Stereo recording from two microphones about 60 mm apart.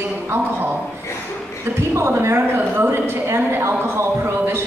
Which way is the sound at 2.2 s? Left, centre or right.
Right.